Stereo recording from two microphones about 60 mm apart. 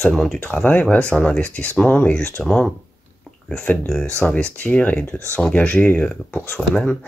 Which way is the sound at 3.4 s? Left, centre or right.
Centre.